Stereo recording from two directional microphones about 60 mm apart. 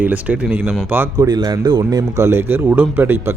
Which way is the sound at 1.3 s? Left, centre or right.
Right.